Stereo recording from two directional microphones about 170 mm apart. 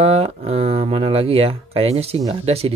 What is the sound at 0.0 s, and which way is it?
Speech, 35° right (ahead or behind).